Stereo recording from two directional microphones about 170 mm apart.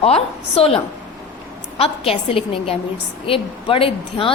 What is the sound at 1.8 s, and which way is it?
A woman's voice, 35° left (ahead or behind).